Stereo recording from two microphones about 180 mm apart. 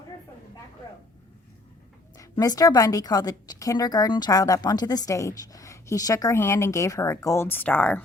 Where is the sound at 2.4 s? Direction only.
20° left (ahead or behind).